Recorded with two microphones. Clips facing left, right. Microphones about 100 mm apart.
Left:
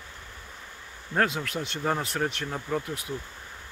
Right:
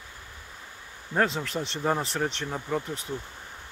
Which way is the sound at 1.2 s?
5° left (ahead or behind).